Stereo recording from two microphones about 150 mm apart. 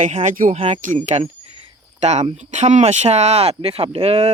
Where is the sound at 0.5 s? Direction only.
45° right (ahead or behind).